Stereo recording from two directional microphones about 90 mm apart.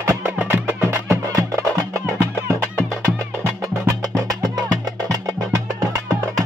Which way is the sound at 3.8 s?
40° right (ahead or behind).